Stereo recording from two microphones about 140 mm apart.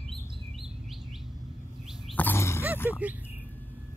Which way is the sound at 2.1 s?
15° left (ahead or behind).